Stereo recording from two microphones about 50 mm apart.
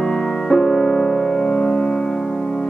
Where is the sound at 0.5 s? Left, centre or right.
Centre.